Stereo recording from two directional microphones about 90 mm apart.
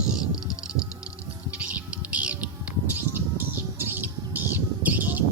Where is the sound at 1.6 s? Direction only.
15° right (ahead or behind).